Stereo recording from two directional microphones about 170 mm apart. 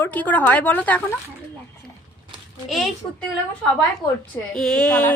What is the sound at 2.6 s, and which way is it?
Speech, centre (ahead or behind).